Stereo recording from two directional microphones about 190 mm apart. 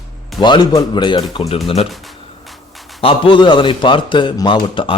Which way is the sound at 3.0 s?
30° left (ahead or behind).